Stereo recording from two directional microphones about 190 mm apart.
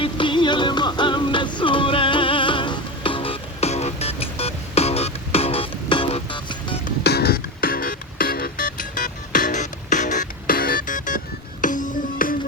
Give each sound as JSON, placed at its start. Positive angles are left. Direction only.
{"t": 0.0, "sound": "music", "side_deg": 25}
{"t": 7.0, "sound": "music", "side_deg": 55}